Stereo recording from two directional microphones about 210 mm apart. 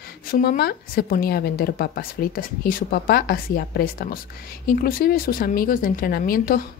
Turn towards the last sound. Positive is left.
turn(degrees=45)  # may be behind; listen again after turning